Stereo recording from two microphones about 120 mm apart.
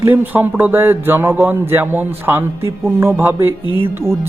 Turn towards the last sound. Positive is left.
turn(degrees=-20)  # may be behind; listen again after turning